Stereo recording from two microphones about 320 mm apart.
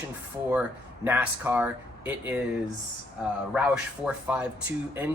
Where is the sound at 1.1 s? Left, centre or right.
Centre.